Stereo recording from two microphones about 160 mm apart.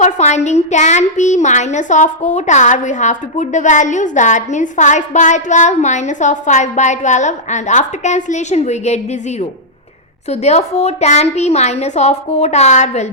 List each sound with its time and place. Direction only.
0.0 s a woman's voice: 45° left (ahead or behind)
10.2 s a woman's voice: 45° left (ahead or behind)